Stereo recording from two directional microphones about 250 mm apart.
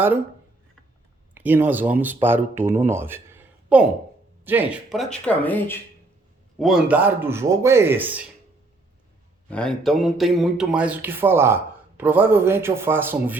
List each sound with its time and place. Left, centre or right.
1.3 s speech: centre
9.5 s speech: centre